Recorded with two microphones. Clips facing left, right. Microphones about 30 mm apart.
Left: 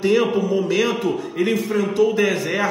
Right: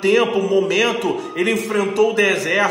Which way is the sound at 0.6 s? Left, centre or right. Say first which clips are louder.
Right 3 dB; right.